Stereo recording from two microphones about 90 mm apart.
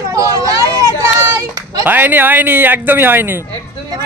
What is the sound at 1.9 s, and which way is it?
A man's voice, 20° right (ahead or behind).